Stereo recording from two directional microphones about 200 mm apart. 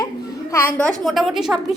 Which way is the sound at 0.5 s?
10° left (ahead or behind).